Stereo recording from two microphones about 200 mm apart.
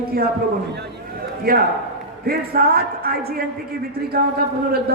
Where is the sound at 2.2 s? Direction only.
50° right (ahead or behind).